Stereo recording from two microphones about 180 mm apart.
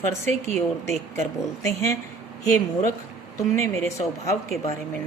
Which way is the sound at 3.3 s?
15° left (ahead or behind).